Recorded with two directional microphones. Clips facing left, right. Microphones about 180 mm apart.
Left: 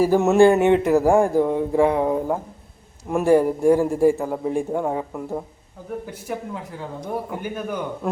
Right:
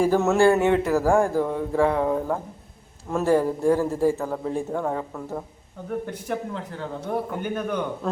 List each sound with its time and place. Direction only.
0.0 s speech: 15° left (ahead or behind)